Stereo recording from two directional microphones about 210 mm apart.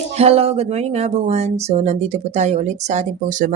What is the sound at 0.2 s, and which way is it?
Speech, 30° right (ahead or behind).